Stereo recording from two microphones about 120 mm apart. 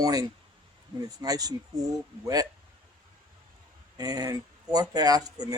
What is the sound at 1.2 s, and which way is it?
Speech, 30° right (ahead or behind).